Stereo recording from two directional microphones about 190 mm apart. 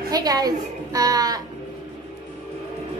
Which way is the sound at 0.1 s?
20° right (ahead or behind).